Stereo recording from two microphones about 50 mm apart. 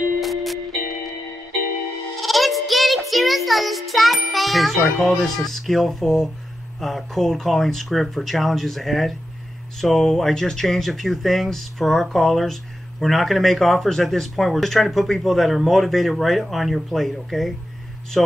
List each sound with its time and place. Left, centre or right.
0.2 s music: centre
2.2 s music: centre
6.8 s speech: centre